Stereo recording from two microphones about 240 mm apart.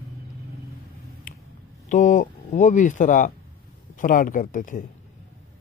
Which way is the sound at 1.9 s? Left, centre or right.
Left.